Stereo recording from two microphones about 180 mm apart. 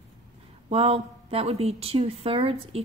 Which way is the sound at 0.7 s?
35° right (ahead or behind).